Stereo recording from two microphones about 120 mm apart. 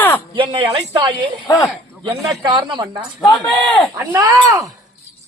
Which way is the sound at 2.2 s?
30° right (ahead or behind).